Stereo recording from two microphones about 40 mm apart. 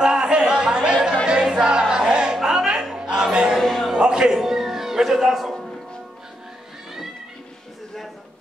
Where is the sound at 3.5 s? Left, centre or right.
Centre.